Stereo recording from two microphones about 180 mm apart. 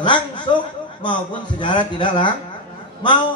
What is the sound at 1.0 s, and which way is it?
A man's voice, 25° left (ahead or behind).